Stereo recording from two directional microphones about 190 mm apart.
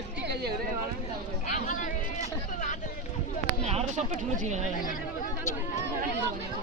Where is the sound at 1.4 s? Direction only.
40° left (ahead or behind).